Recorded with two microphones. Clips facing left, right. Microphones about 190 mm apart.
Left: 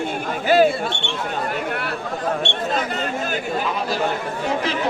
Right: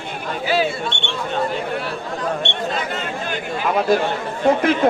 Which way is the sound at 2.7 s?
45° left (ahead or behind).